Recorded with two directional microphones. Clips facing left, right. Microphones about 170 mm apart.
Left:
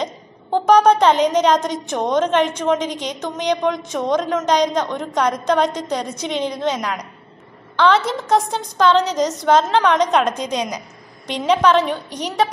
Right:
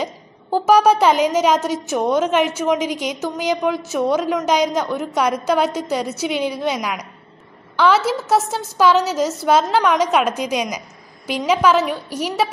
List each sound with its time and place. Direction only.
0.0 s a woman's voice: 5° right (ahead or behind)